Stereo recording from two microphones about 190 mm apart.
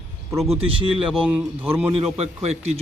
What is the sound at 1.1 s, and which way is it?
Speech, 5° right (ahead or behind).